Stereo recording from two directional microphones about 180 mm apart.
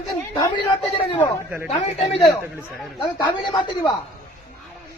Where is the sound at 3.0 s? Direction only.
25° left (ahead or behind).